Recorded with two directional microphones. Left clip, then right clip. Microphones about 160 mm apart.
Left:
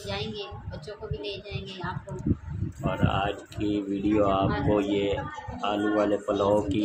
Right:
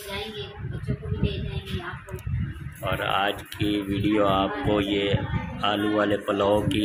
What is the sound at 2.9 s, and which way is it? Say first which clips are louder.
Speech: right 4 dB; centre (ahead or behind).